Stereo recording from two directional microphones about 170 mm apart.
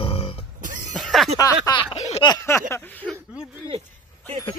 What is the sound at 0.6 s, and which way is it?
Music, 50° right (ahead or behind).